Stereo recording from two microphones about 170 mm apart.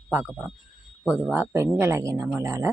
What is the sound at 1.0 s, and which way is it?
Speech, 10° left (ahead or behind).